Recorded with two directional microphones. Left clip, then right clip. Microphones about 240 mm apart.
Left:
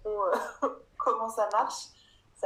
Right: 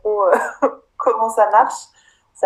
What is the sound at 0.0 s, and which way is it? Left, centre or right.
Throat clearing, right.